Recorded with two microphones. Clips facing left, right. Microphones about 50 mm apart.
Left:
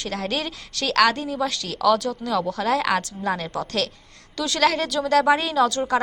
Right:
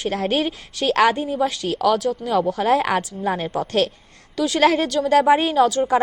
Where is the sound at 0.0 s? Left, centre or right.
Right.